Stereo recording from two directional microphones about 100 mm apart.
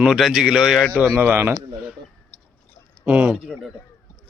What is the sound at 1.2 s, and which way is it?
Speech, 25° right (ahead or behind).